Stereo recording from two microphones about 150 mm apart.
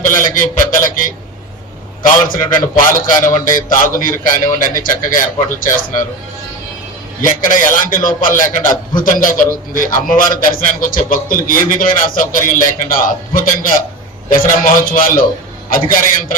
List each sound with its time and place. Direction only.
0.0 s a sound: 60° left (ahead or behind)
0.3 s a man's voice: 65° left (ahead or behind)
7.2 s a man's voice: 60° left (ahead or behind)